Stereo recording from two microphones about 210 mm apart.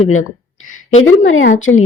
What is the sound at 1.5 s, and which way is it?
Speech, 70° left (ahead or behind).